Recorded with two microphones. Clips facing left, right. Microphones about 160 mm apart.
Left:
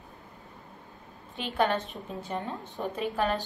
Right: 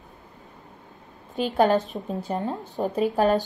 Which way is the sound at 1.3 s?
40° right (ahead or behind).